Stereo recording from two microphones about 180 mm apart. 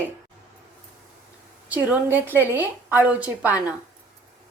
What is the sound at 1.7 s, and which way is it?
A woman's voice, 10° right (ahead or behind).